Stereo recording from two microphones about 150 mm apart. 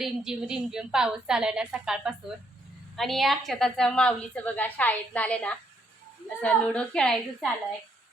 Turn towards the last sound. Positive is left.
turn(degrees=5)  # may be behind; listen again after turning